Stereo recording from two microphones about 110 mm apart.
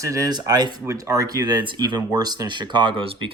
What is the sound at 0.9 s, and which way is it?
Speech, 30° right (ahead or behind).